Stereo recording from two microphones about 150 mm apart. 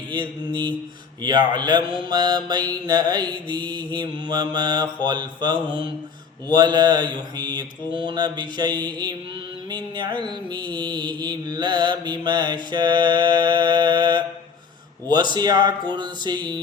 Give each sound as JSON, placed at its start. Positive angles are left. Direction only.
{"t": 0.1, "sound": "mantra", "side_deg": -30}
{"t": 10.2, "sound": "mantra", "side_deg": -30}